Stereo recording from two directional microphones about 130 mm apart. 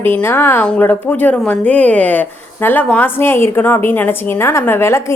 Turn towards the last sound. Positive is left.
turn(degrees=20)  # may be behind; listen again after turning